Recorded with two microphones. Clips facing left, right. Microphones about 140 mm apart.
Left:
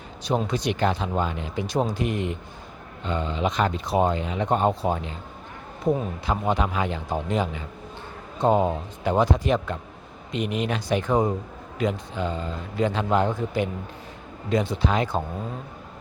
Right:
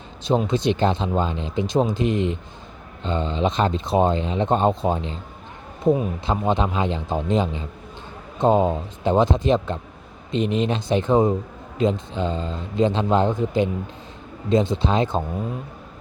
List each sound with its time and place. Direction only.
0.3 s speech: 20° right (ahead or behind)